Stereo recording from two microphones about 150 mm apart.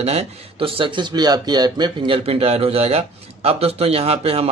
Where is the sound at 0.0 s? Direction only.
45° right (ahead or behind).